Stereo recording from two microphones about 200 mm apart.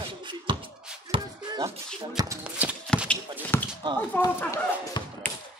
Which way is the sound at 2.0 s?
20° right (ahead or behind).